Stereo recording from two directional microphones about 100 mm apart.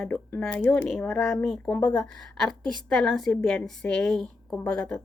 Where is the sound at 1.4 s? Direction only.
10° left (ahead or behind).